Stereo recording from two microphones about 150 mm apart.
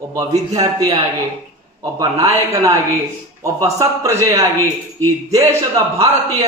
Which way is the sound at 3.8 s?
20° right (ahead or behind).